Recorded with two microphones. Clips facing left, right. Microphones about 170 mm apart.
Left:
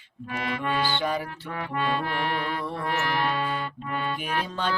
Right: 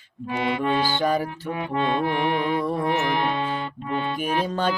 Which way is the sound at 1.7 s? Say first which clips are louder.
Right 4 dB; 20° right (ahead or behind).